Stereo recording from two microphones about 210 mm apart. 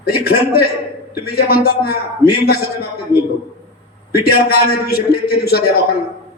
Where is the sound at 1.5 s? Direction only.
45° left (ahead or behind).